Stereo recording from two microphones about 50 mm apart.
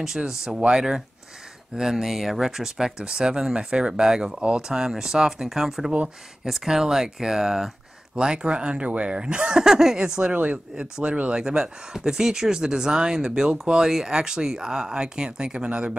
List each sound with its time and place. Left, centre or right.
0.0 s speech: centre